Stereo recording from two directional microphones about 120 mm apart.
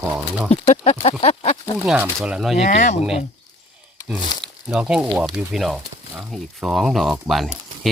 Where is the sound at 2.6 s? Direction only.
90° left.